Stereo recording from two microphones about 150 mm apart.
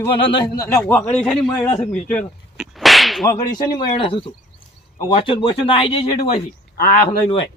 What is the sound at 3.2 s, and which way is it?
A man's voice, 25° left (ahead or behind).